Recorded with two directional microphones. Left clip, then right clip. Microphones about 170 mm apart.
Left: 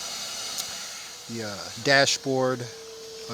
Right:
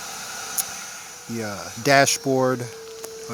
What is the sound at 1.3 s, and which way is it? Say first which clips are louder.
Speech: right 4 dB; 10° right (ahead or behind).